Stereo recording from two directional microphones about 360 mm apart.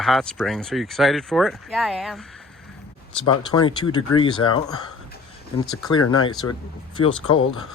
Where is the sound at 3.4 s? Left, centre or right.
Centre.